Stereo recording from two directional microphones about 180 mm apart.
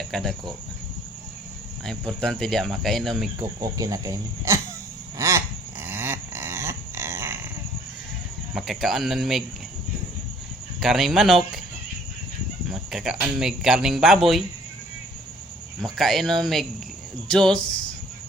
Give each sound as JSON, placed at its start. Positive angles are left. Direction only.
{"t": 0.1, "sound": "cricket", "side_deg": 0}
{"t": 1.8, "sound": "speech", "side_deg": 5}
{"t": 3.6, "sound": "speech", "side_deg": -20}
{"t": 5.1, "sound": "a sound", "side_deg": -15}
{"t": 8.5, "sound": "speech", "side_deg": 0}
{"t": 10.8, "sound": "speech", "side_deg": 0}
{"t": 12.6, "sound": "speech", "side_deg": 0}
{"t": 15.8, "sound": "speech", "side_deg": 0}
{"t": 17.6, "sound": "speech", "side_deg": 25}